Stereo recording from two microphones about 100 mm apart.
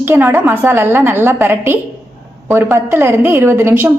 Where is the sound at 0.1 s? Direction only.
20° right (ahead or behind).